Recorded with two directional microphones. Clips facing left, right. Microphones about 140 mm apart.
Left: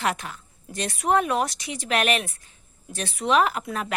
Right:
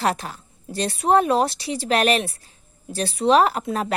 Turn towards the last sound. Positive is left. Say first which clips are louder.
# right 4 dB
turn(degrees=-30)  # may be behind; listen again after turning